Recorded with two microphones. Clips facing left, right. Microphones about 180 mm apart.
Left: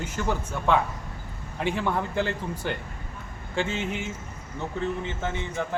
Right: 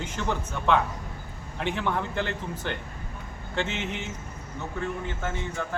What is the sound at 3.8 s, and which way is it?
Speech, 10° left (ahead or behind).